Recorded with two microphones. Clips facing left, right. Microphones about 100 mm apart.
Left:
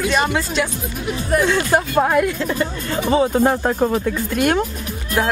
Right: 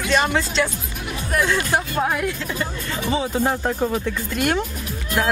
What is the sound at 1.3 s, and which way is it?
Speech, 45° left (ahead or behind).